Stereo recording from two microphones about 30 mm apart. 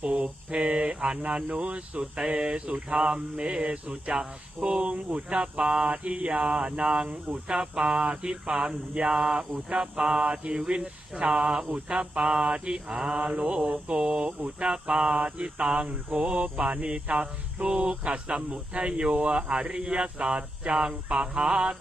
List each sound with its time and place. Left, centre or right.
0.0 s cricket: right
2.0 s mantra: right
9.0 s speech: right
9.6 s mantra: right